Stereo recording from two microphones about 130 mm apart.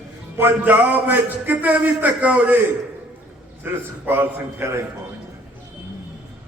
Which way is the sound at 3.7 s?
15° right (ahead or behind).